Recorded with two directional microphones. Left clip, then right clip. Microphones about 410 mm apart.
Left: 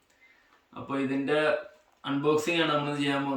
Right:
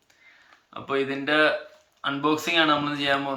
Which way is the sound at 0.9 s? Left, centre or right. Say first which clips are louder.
Right 4 dB; centre.